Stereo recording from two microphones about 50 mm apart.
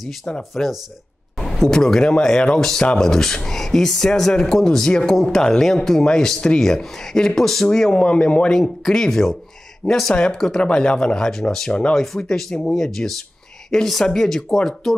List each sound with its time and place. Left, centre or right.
0.4 s speech: centre; by 8.5 s left
8.5 s speech: centre